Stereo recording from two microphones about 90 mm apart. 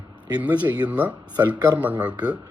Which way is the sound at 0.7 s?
15° right (ahead or behind).